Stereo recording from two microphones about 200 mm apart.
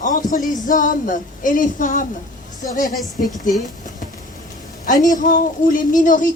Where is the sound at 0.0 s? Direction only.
40° left (ahead or behind).